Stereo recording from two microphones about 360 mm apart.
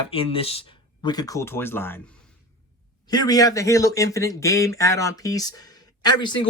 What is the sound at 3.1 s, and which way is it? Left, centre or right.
Speech, centre.